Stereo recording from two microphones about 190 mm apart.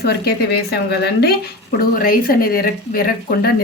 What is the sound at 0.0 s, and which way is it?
A woman's voice, 55° left (ahead or behind).